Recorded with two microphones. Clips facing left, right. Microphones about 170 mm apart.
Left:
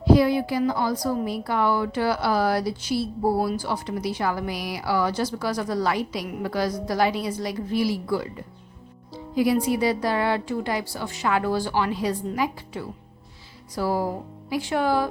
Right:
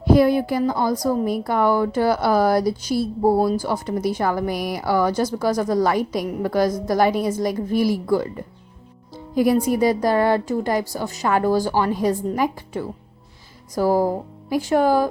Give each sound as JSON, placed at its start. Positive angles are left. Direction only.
{"t": 0.0, "sound": "speech", "side_deg": -50}